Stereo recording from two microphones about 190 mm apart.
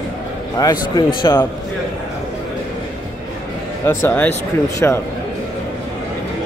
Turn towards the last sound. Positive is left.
turn(degrees=10)  # may be behind; listen again after turning